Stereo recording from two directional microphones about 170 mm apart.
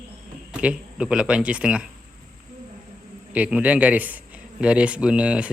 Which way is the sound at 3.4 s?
5° right (ahead or behind).